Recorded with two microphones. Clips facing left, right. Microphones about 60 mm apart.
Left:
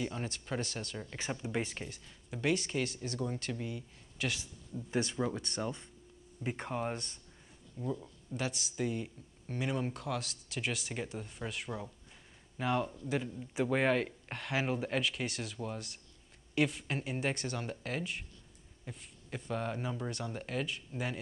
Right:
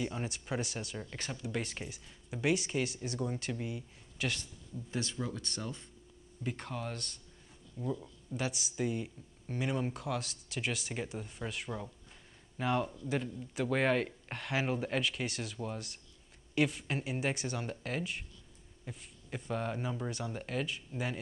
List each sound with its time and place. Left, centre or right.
0.0 s speech: centre
1.3 s speech: left
1.6 s speech: centre
4.9 s speech: left
7.7 s speech: centre